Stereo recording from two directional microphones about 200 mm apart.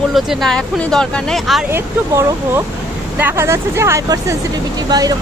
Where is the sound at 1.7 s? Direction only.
15° right (ahead or behind).